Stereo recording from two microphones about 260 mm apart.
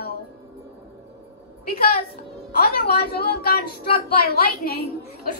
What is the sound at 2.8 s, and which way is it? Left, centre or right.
A woman's voice, left.